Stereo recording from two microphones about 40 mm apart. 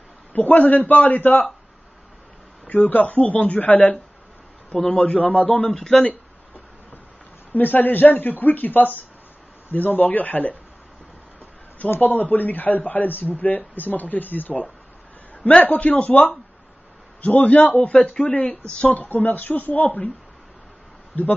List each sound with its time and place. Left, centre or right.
0.3 s a woman's voice: left
2.7 s speech: left
4.9 s speech: left
5.7 s speech: centre
7.5 s a woman's voice: left
12.0 s a woman's voice: left